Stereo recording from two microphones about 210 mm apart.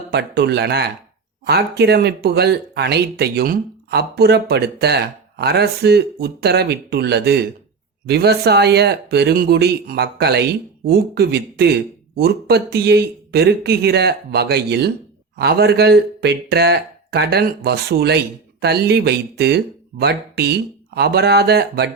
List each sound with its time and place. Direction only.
0.1 s speech: 50° right (ahead or behind)